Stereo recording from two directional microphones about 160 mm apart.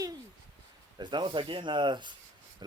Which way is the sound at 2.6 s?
25° right (ahead or behind).